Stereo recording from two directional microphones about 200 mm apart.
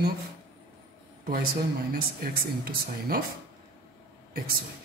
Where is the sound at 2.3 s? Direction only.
50° right (ahead or behind).